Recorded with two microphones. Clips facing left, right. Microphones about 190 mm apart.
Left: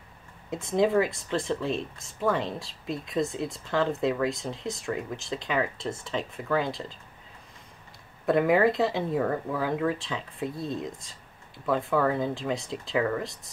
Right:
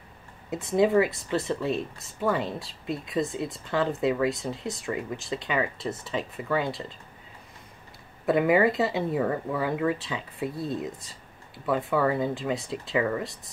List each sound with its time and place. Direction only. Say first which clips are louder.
0.5 s speech: right 2 dB; centre (ahead or behind)
8.3 s speech: even; centre (ahead or behind)